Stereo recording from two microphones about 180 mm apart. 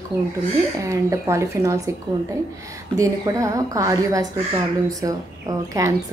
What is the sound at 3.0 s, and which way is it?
Speech, 15° right (ahead or behind).